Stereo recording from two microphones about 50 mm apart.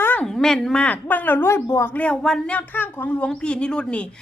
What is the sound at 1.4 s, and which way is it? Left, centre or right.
Speech, left.